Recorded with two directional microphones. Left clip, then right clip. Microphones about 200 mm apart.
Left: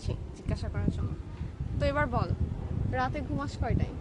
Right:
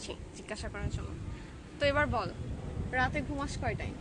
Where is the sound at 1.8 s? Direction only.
5° right (ahead or behind).